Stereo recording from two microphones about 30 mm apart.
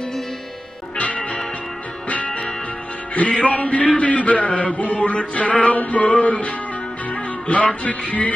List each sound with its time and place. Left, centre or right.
0.9 s music: left